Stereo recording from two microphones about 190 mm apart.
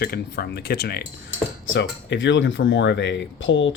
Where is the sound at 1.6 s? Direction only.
80° left.